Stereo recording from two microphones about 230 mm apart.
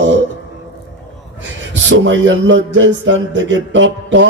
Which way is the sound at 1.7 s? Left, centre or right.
Right.